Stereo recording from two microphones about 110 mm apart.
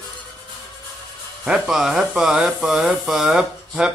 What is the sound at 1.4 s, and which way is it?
Speech, 5° right (ahead or behind).